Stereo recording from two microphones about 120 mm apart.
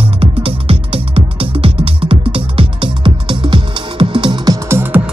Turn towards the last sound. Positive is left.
turn(degrees=-20)  # may be behind; listen again after turning